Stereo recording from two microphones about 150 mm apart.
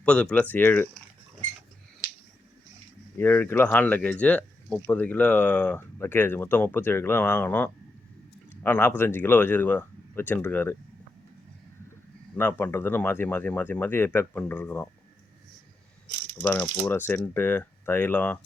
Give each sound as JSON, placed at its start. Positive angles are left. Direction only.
{"t": 0.0, "sound": "speech", "side_deg": 10}
{"t": 3.2, "sound": "speech", "side_deg": 10}
{"t": 12.4, "sound": "speech", "side_deg": 10}
{"t": 16.4, "sound": "speech", "side_deg": 20}